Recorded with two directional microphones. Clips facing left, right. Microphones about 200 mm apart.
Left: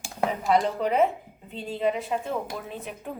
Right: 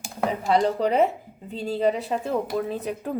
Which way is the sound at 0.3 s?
35° right (ahead or behind).